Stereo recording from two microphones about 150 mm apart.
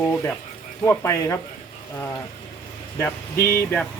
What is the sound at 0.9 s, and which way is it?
Speech, 20° left (ahead or behind).